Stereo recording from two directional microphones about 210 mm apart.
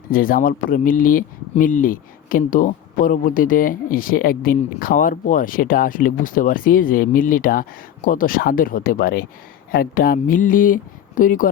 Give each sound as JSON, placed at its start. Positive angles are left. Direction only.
{"t": 0.1, "sound": "speech", "side_deg": 40}